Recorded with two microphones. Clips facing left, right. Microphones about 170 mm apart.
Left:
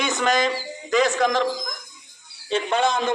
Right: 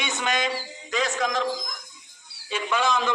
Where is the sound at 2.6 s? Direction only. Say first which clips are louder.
Left 3 dB; 55° left (ahead or behind).